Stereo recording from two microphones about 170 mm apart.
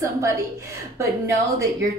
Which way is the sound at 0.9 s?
15° right (ahead or behind).